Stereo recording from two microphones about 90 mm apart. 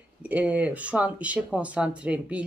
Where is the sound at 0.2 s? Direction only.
15° right (ahead or behind).